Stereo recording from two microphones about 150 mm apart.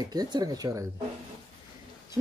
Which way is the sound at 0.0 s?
25° right (ahead or behind).